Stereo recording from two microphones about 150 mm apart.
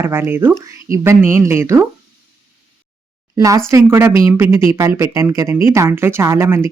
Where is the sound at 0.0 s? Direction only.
15° right (ahead or behind).